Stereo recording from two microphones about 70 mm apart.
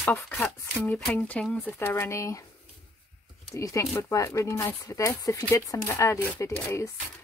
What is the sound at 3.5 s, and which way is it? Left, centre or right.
Speech, left.